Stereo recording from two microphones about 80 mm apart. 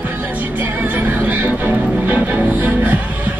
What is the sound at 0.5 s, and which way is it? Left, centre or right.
Music, right.